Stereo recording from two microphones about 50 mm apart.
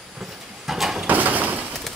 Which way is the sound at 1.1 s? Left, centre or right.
Right.